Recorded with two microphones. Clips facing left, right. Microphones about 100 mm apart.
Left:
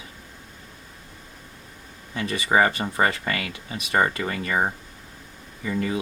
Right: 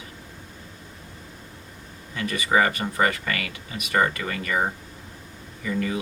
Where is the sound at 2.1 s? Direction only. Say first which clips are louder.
Left 1 dB; 30° left (ahead or behind).